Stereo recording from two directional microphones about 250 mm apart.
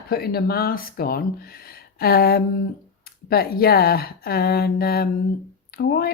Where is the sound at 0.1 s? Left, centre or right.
Left.